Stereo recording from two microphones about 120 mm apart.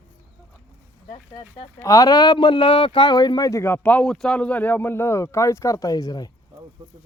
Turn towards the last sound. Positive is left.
turn(degrees=35)  # may be behind; listen again after turning